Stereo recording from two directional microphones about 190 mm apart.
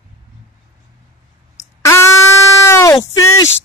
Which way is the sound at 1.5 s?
15° left (ahead or behind).